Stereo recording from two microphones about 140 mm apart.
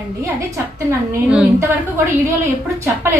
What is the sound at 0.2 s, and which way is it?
Speech, 20° right (ahead or behind).